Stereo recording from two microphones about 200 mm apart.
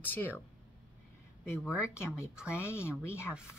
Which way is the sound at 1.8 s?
15° left (ahead or behind).